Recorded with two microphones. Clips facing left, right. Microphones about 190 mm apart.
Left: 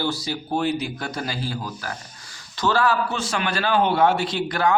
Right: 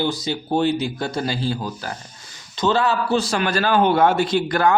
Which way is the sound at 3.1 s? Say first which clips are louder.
Right 6 dB; 35° right (ahead or behind).